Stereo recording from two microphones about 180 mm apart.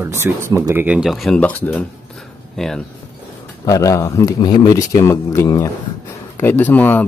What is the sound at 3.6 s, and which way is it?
Speech, 20° left (ahead or behind).